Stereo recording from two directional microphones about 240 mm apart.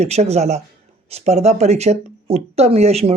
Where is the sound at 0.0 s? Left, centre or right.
Right.